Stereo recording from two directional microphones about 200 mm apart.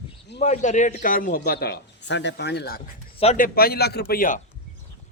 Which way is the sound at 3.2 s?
30° left (ahead or behind).